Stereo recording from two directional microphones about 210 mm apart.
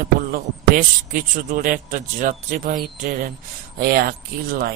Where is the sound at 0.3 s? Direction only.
40° right (ahead or behind).